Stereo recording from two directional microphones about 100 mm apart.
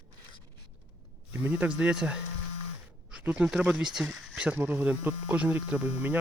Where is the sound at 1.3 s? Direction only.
15° right (ahead or behind).